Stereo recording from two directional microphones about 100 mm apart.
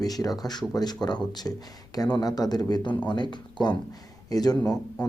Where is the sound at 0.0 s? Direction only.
40° left (ahead or behind).